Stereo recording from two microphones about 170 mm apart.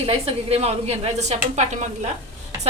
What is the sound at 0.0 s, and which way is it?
A woman's voice, 35° right (ahead or behind).